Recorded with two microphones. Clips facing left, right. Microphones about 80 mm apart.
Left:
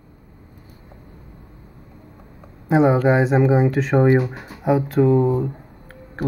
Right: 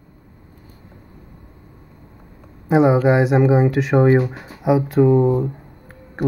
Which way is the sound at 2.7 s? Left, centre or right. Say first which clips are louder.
Right 1 dB; centre.